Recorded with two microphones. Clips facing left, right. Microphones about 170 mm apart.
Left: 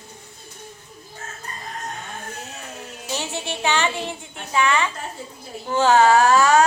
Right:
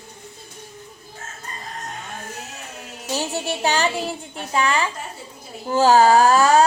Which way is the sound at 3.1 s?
40° right (ahead or behind).